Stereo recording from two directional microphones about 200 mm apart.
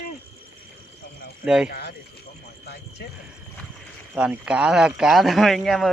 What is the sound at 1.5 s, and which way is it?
Speech, 5° right (ahead or behind).